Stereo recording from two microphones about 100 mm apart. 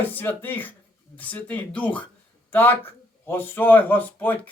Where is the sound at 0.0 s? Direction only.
20° left (ahead or behind).